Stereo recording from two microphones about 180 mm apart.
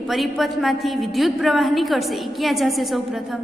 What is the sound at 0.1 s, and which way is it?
A woman's voice, centre (ahead or behind).